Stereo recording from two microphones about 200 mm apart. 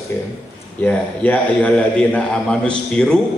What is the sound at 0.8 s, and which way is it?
A man's voice, 5° left (ahead or behind).